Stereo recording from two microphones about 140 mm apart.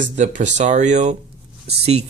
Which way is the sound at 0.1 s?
60° right (ahead or behind).